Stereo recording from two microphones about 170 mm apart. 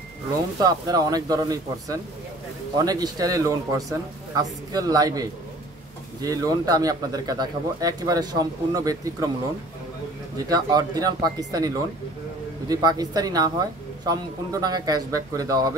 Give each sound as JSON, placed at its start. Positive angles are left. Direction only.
{"t": 0.6, "sound": "speech", "side_deg": -20}
{"t": 10.5, "sound": "speech", "side_deg": -20}